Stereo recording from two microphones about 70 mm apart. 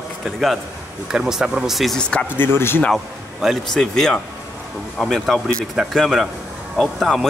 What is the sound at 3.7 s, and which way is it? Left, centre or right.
Speech, centre.